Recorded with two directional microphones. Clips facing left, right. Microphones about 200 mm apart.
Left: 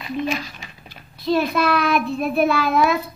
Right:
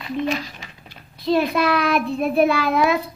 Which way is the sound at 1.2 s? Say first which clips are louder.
Right 1 dB; 25° right (ahead or behind).